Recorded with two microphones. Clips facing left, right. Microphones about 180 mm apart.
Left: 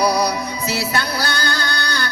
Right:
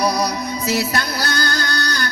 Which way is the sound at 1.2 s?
40° right (ahead or behind).